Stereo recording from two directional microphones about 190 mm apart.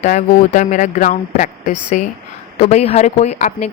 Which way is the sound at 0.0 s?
40° left (ahead or behind).